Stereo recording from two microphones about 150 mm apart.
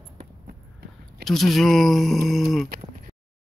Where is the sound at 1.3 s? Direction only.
Centre (ahead or behind).